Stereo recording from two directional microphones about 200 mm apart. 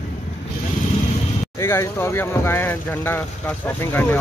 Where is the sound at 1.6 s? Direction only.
10° left (ahead or behind).